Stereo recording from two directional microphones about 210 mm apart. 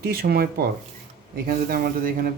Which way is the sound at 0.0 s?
50° right (ahead or behind).